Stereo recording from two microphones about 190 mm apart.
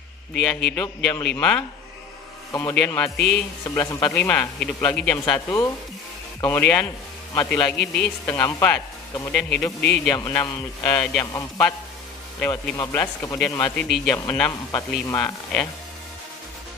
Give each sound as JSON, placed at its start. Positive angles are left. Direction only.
{"t": 0.3, "sound": "a man's voice", "side_deg": 0}
{"t": 2.9, "sound": "a man's voice", "side_deg": 5}
{"t": 3.6, "sound": "speech", "side_deg": 15}
{"t": 10.1, "sound": "speech", "side_deg": 15}